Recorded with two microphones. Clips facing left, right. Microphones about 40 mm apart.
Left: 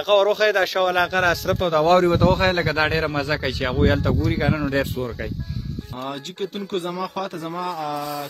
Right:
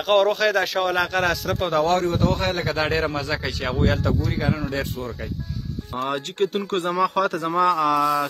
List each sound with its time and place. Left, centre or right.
0.0 s speech: centre
1.9 s a man's voice: left
5.9 s a man's voice: right